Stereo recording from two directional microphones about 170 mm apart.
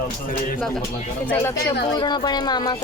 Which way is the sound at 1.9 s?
25° left (ahead or behind).